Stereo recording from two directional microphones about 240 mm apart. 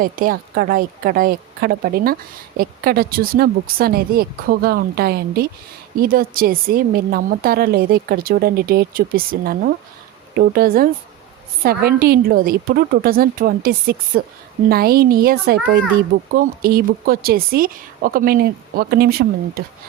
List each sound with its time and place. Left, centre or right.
0.0 s a woman's voice: right